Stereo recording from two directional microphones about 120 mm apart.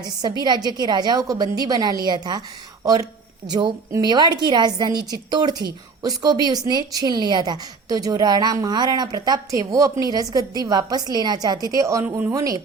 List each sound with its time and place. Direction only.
0.0 s a woman's voice: 35° right (ahead or behind)
12.0 s speech: 10° right (ahead or behind)
12.3 s speech: 30° right (ahead or behind)